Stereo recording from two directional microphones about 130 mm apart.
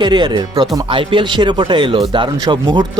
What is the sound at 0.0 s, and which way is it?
Speech, 35° right (ahead or behind).